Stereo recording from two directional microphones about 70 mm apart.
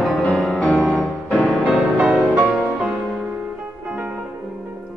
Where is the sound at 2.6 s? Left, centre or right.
Centre.